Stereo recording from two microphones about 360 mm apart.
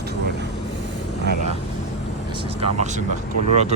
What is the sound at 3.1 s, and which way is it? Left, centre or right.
Speech, right.